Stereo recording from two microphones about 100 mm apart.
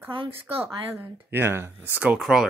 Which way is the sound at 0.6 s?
20° right (ahead or behind).